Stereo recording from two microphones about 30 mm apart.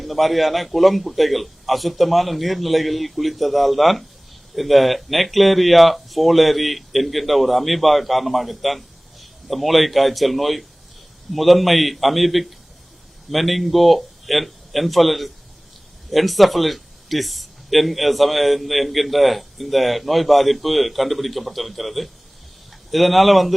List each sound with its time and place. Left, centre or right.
0.0 s speech: centre